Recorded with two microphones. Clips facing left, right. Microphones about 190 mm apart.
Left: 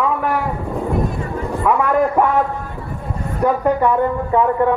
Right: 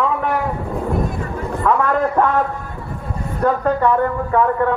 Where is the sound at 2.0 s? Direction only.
20° left (ahead or behind).